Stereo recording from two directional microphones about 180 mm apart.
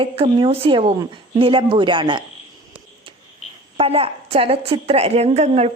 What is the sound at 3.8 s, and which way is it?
Speech, 35° right (ahead or behind).